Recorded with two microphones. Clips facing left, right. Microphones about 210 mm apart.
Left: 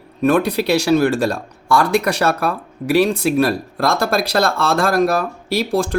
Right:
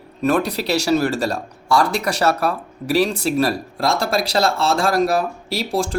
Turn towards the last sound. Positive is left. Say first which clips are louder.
# left 3 dB
turn(degrees=55)  # may be behind; listen again after turning